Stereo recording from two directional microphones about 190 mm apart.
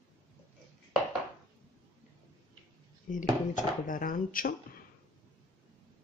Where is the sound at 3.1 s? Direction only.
45° left (ahead or behind).